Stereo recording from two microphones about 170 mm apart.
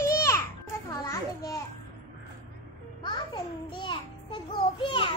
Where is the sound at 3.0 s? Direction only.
25° left (ahead or behind).